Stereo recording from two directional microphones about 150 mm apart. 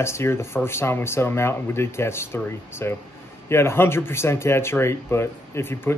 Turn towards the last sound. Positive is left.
turn(degrees=15)  # may be behind; listen again after turning